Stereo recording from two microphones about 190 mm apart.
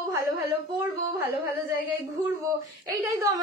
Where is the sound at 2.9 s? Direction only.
20° right (ahead or behind).